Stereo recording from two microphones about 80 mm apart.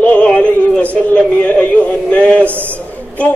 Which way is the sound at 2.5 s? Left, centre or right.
Right.